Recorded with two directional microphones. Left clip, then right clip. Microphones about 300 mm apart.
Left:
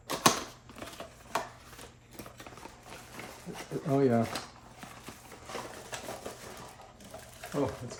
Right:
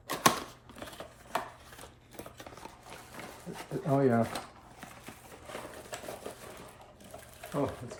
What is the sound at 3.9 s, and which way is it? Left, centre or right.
Dishes, centre.